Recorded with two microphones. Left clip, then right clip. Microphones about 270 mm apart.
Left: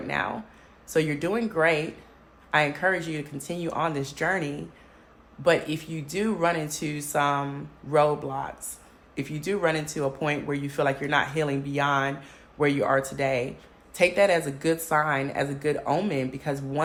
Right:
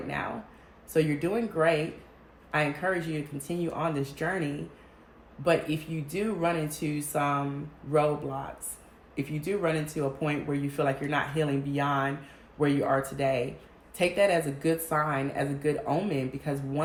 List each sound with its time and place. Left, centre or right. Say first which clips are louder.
0.9 s speech: left 2 dB; centre